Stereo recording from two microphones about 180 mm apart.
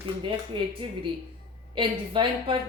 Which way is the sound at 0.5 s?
30° right (ahead or behind).